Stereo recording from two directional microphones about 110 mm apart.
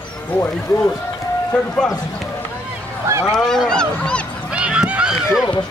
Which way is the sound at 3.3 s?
5° left (ahead or behind).